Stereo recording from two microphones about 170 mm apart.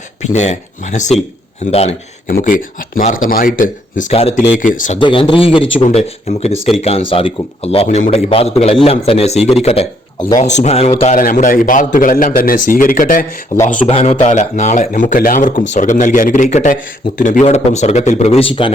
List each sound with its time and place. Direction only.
0.2 s speech: 45° left (ahead or behind)
1.7 s a man's voice: 35° left (ahead or behind)
2.4 s speech: 55° left (ahead or behind)
4.1 s speech: 35° left (ahead or behind)
4.9 s a man's voice: 30° left (ahead or behind)
11.2 s speech: 50° left (ahead or behind)
13.9 s a man's voice: 35° left (ahead or behind)